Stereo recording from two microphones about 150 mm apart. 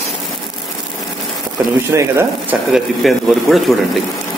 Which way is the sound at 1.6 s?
10° right (ahead or behind).